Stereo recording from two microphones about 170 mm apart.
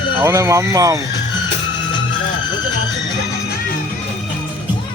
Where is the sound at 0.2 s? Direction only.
15° right (ahead or behind).